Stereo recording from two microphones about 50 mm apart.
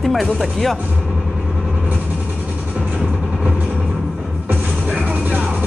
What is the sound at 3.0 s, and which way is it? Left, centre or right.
Music, centre.